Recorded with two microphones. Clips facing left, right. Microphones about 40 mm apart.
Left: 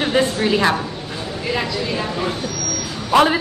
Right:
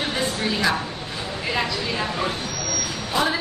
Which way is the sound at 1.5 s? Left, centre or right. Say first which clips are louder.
Left 3 dB; centre.